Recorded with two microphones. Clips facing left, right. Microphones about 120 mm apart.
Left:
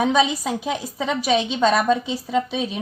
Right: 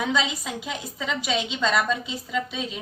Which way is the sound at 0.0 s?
50° left (ahead or behind).